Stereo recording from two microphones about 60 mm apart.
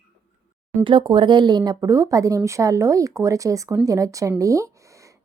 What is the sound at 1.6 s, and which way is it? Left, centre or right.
A woman's voice, right.